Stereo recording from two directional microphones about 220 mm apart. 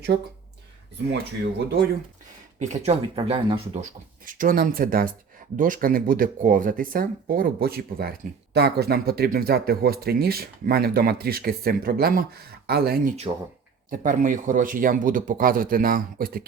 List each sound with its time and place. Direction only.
0.1 s speech: 25° right (ahead or behind)
1.5 s speech: 50° right (ahead or behind)
2.6 s speech: 30° right (ahead or behind)
4.3 s speech: 40° right (ahead or behind)